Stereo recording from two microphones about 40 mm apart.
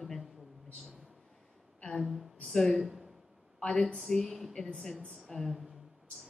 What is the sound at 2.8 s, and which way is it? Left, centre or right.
Speech, centre.